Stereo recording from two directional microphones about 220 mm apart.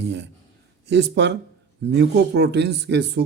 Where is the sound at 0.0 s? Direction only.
55° right (ahead or behind).